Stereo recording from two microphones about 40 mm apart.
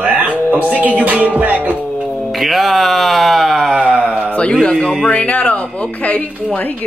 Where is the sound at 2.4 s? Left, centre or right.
Centre.